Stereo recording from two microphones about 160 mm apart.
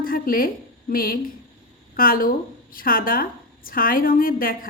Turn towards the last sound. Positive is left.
turn(degrees=60)  # may be behind; listen again after turning